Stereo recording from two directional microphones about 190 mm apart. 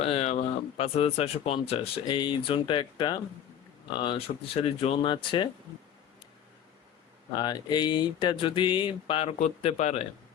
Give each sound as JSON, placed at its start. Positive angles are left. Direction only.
{"t": 0.0, "sound": "speech", "side_deg": 30}
{"t": 7.3, "sound": "speech", "side_deg": 20}